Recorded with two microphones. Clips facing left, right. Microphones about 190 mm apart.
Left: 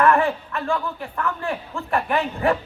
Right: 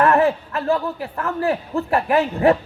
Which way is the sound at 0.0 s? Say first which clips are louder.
Right 2 dB; 35° right (ahead or behind).